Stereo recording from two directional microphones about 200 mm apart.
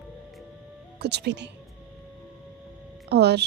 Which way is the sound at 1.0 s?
55° right (ahead or behind).